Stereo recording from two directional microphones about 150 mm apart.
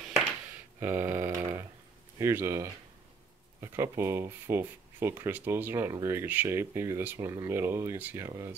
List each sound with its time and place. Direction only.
0.7 s speech: 15° right (ahead or behind)